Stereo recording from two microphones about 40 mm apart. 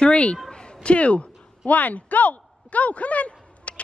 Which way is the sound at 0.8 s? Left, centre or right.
Left.